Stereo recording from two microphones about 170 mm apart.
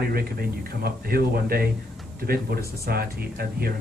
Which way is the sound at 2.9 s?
65° right (ahead or behind).